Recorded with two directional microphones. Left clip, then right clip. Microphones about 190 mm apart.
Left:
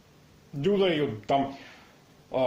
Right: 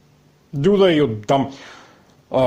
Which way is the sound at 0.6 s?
50° right (ahead or behind).